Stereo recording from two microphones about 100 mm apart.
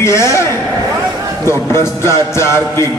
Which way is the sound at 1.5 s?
25° left (ahead or behind).